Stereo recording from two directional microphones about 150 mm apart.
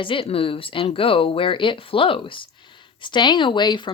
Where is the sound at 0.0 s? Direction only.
35° left (ahead or behind).